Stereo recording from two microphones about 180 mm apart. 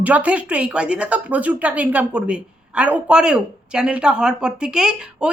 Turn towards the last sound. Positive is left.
turn(degrees=-5)  # may be behind; listen again after turning